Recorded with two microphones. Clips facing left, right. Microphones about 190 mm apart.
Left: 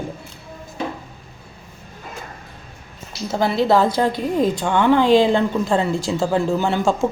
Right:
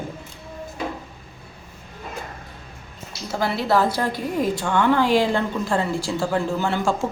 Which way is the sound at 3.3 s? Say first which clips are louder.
Left 5 dB; 25° left (ahead or behind).